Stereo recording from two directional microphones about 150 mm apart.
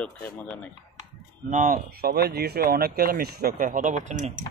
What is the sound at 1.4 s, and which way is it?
Speech, 60° right (ahead or behind).